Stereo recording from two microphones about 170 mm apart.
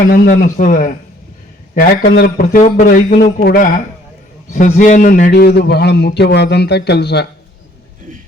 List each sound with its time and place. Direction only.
0.0 s a man's voice: 60° left (ahead or behind)
5.3 s a man's voice: 75° left (ahead or behind)